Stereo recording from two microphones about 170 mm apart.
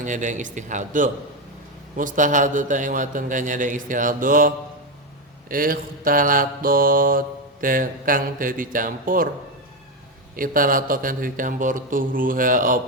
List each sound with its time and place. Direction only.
0.0 s a man's voice: 50° right (ahead or behind)
5.5 s mantra: 55° right (ahead or behind)
10.3 s a man's voice: 55° right (ahead or behind)